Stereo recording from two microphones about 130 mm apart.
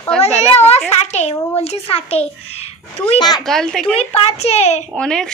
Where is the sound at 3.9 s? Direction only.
50° left (ahead or behind).